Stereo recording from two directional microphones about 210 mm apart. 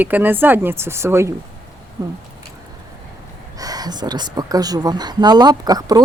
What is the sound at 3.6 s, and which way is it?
Speech, 15° right (ahead or behind).